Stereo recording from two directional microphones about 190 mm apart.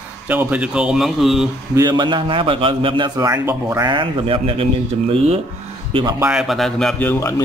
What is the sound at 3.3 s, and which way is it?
A man's voice, 15° right (ahead or behind).